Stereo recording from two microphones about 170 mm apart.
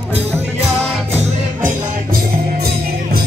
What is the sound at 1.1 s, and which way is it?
Music, 40° right (ahead or behind).